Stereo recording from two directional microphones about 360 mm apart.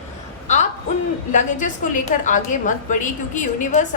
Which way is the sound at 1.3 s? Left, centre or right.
Left.